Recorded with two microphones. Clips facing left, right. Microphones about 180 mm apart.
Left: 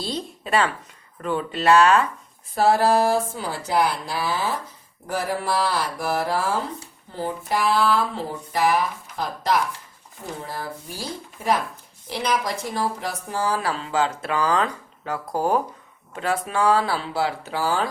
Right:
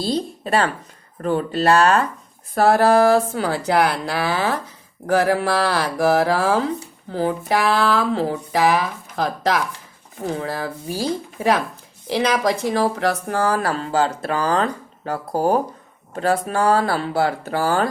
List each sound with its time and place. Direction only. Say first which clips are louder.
0.0 s speech: right 7 dB; 35° right (ahead or behind)
2.6 s speech: right 4 dB; 55° right (ahead or behind)
5.0 s speech: right 8 dB; 90° right; by 17.8 s 50° right (ahead or behind)